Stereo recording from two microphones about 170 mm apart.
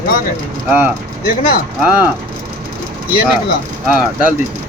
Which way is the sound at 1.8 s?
10° right (ahead or behind).